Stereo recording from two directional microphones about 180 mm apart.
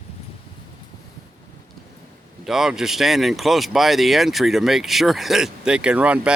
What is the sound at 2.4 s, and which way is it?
Speech, centre (ahead or behind).